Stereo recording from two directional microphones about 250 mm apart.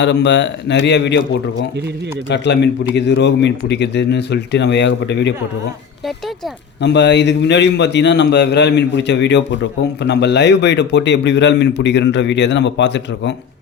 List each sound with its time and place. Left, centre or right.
0.0 s a man's voice: left
6.8 s a man's voice: left